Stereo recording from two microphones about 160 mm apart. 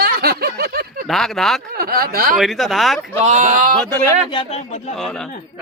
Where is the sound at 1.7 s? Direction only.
70° right (ahead or behind).